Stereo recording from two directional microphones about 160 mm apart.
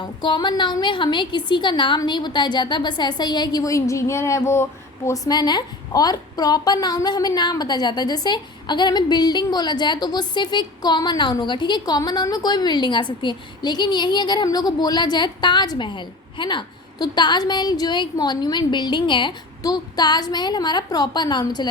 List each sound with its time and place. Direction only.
0.0 s a woman's voice: 30° left (ahead or behind)